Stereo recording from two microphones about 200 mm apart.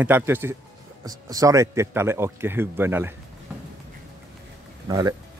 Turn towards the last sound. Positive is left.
turn(degrees=-20)  # may be behind; listen again after turning